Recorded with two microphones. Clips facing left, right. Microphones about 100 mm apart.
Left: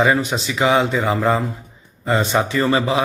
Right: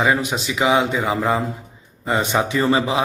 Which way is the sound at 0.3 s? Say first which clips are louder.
Left 1 dB; 10° right (ahead or behind).